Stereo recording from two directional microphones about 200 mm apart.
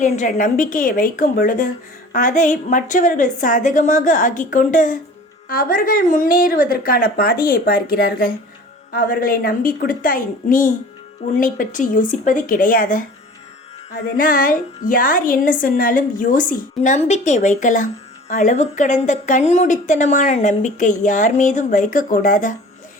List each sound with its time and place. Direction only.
0.0 s a woman's voice: 40° left (ahead or behind)